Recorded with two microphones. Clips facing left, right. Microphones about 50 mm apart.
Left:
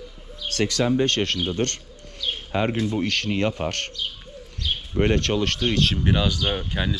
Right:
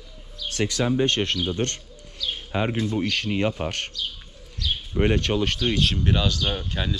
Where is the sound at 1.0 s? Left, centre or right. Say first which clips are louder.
Even; centre.